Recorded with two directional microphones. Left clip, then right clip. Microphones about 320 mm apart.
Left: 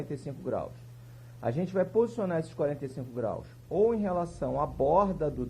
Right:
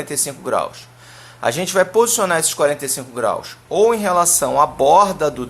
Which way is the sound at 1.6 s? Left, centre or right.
Centre.